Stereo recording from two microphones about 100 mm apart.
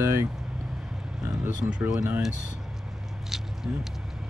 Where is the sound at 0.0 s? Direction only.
25° right (ahead or behind).